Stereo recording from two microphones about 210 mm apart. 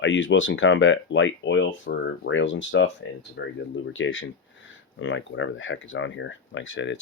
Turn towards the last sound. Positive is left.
turn(degrees=60)  # may be behind; listen again after turning